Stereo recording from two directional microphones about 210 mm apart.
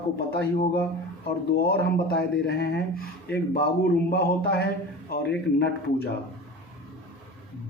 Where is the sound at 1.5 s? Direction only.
50° left (ahead or behind).